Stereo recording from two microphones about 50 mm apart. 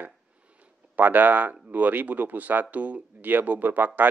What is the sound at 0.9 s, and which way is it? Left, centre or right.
Speech, right.